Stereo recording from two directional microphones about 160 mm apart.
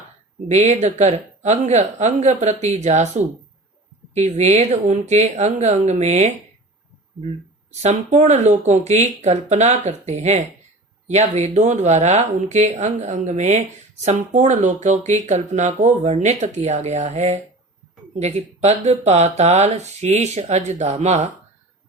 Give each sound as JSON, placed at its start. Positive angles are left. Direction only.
{"t": 0.4, "sound": "speech", "side_deg": -45}
{"t": 7.8, "sound": "speech", "side_deg": -45}